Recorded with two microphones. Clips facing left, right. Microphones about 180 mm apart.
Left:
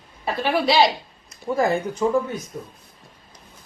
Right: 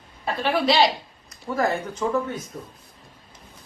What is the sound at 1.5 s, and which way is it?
Speech, 25° left (ahead or behind).